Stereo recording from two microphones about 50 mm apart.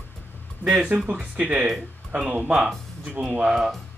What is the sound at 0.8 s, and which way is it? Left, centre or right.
Speech, right.